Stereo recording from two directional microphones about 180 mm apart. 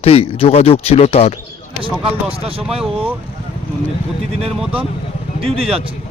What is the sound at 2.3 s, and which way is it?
Speech, 30° right (ahead or behind).